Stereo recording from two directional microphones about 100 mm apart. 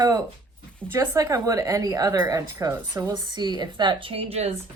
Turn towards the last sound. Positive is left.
turn(degrees=-90)